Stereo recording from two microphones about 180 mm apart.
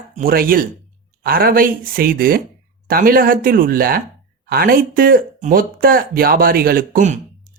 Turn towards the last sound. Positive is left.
turn(degrees=-45)  # may be behind; listen again after turning